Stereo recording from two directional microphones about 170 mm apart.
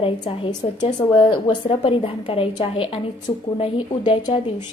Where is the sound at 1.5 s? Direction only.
30° left (ahead or behind).